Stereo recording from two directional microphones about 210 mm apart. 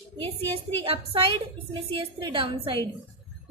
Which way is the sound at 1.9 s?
25° right (ahead or behind).